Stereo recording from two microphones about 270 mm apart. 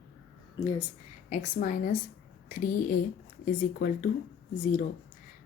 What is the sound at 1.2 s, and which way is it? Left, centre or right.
A woman's voice, left.